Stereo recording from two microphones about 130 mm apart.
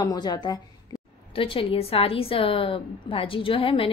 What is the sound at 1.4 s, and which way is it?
A woman's voice, 45° left (ahead or behind).